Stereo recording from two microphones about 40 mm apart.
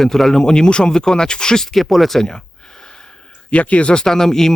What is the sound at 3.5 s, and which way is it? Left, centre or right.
Speech, left.